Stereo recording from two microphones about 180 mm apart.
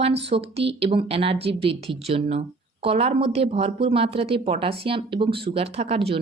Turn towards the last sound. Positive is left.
turn(degrees=-30)  # may be behind; listen again after turning